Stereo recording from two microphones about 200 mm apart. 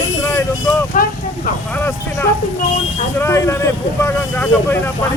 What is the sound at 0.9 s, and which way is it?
Speech, 40° left (ahead or behind).